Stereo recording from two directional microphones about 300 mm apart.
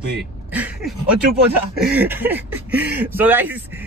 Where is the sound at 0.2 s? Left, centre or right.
Centre.